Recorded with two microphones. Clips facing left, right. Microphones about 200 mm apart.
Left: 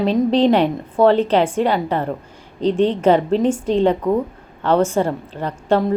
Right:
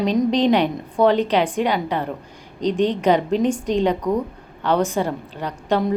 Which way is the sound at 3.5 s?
5° left (ahead or behind).